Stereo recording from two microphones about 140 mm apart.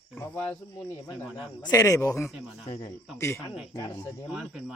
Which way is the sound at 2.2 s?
Centre (ahead or behind).